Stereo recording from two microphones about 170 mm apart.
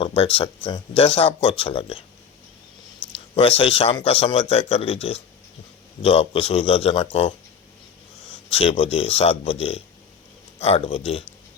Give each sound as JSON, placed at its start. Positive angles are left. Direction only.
{"t": 0.0, "sound": "speech", "side_deg": 35}
{"t": 3.1, "sound": "speech", "side_deg": 35}
{"t": 8.4, "sound": "speech", "side_deg": 35}